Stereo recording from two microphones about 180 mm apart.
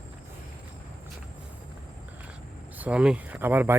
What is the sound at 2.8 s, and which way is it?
Speech, 5° right (ahead or behind).